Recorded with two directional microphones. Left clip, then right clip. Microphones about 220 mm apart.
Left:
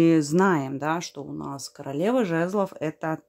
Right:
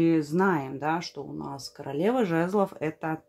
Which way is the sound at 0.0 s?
35° left (ahead or behind).